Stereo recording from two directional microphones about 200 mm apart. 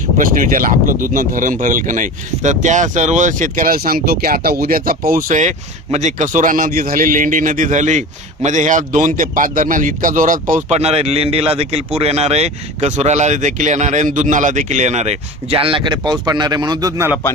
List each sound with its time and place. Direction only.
0.2 s speech: 45° right (ahead or behind); by 17.2 s 15° right (ahead or behind)